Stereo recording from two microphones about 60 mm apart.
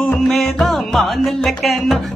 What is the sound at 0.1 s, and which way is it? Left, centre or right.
Music, centre.